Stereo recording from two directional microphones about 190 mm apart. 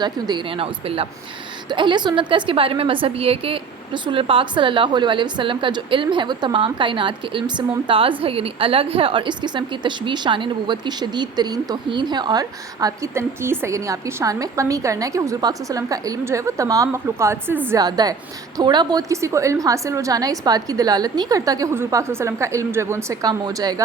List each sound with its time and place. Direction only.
0.0 s a woman's voice: 25° right (ahead or behind)